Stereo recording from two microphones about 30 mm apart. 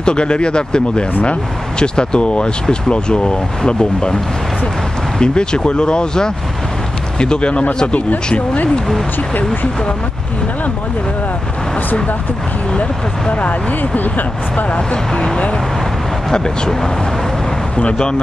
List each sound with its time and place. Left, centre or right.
0.0 s speech: left
5.2 s speech: left
9.3 s speech: left
13.3 s speech: left
14.8 s speech: left